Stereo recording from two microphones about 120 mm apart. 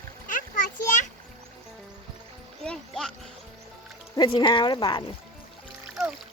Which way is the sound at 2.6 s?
5° left (ahead or behind).